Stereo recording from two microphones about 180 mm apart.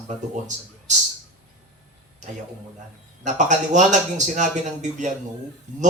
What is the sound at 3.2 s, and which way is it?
A man's voice, 40° right (ahead or behind).